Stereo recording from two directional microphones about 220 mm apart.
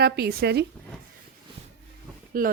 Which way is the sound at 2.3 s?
40° right (ahead or behind).